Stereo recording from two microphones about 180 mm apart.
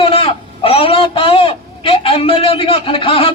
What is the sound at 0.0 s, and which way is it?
A man's voice, 30° left (ahead or behind).